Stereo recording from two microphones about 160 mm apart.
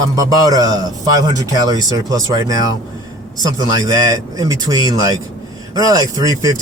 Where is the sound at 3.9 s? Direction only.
25° right (ahead or behind).